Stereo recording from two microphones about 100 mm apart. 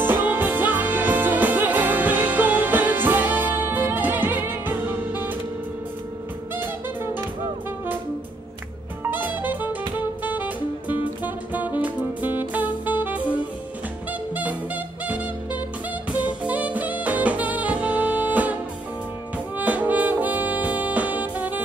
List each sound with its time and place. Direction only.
0.0 s music: 20° right (ahead or behind)
6.5 s music: 20° right (ahead or behind)
9.1 s jazz: 20° right (ahead or behind)
10.9 s music: 15° right (ahead or behind)
19.3 s brass instrument: 15° right (ahead or behind)